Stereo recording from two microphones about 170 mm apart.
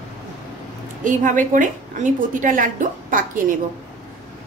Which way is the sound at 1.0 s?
50° right (ahead or behind).